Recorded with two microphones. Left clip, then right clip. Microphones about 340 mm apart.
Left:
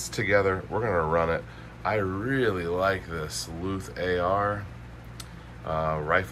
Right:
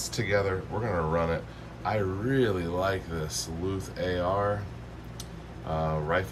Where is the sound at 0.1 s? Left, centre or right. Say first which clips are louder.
Left 5 dB; centre.